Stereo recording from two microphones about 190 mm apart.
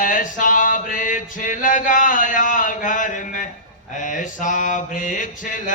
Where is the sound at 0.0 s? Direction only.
45° left (ahead or behind).